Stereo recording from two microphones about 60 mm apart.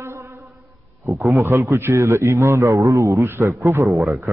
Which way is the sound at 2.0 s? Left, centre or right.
Right.